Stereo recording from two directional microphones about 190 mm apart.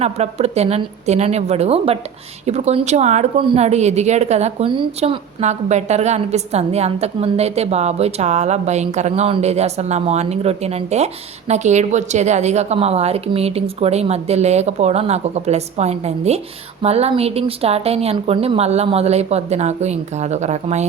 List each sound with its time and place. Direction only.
0.0 s a woman's voice: 35° right (ahead or behind)